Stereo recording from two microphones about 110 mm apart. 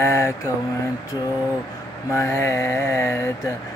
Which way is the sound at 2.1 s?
25° left (ahead or behind).